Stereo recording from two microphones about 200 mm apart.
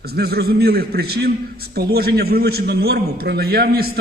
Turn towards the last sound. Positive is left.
turn(degrees=-50)  # may be behind; listen again after turning